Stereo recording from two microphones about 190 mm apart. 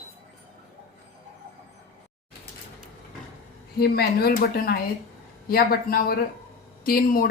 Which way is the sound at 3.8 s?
55° left (ahead or behind).